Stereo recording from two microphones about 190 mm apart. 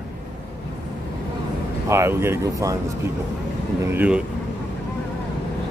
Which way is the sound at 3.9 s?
5° right (ahead or behind).